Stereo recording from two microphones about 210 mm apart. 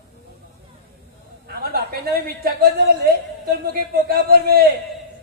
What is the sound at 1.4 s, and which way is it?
A man's voice, 45° right (ahead or behind).